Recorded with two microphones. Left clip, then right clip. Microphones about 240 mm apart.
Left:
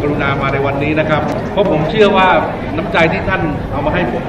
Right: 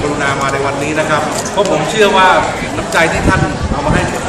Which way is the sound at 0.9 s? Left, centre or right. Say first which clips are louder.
Right 1 dB; centre.